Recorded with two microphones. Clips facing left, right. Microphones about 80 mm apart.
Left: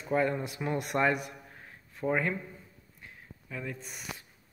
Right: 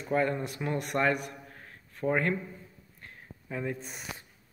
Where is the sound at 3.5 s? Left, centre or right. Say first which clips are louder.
Right 5 dB; right.